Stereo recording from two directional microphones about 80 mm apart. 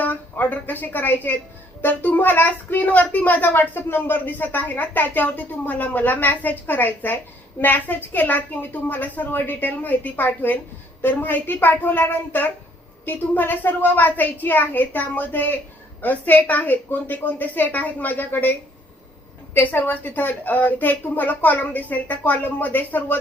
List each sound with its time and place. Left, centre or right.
0.0 s a woman's voice: left
19.5 s a child's voice: left